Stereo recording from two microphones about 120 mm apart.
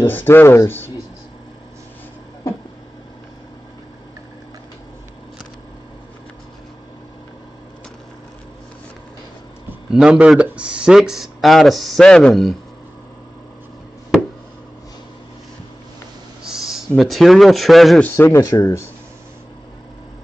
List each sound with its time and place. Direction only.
0.0 s speech: 20° left (ahead or behind)
9.8 s speech: 5° right (ahead or behind)
16.4 s a sound: 5° right (ahead or behind)
16.9 s speech: centre (ahead or behind)
18.0 s speech: 20° left (ahead or behind)